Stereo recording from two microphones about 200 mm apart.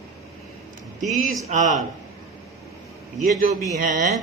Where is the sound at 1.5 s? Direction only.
40° right (ahead or behind).